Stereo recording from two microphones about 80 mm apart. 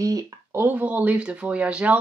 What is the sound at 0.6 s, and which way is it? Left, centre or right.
Speech, right.